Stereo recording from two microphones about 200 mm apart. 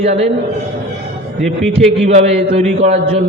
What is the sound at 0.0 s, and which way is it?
Speech, 30° right (ahead or behind).